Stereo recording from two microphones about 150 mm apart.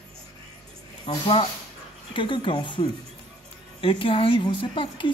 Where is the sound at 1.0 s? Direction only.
35° left (ahead or behind).